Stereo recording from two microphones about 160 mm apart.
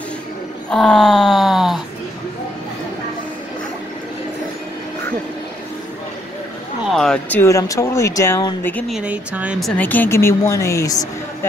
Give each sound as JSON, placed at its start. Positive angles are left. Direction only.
{"t": 0.7, "sound": "speech", "side_deg": 5}
{"t": 6.9, "sound": "speech", "side_deg": 5}
{"t": 8.8, "sound": "speech", "side_deg": -5}
{"t": 9.6, "sound": "speech", "side_deg": 5}